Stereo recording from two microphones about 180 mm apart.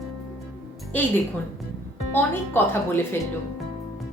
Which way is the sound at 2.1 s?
10° left (ahead or behind).